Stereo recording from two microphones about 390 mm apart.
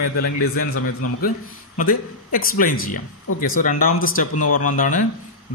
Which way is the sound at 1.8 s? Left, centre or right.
Left.